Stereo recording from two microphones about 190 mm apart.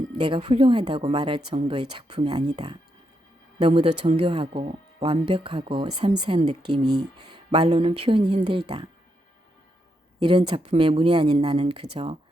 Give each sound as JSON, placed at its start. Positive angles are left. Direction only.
{"t": 0.2, "sound": "speech", "side_deg": -30}
{"t": 10.2, "sound": "speech", "side_deg": -25}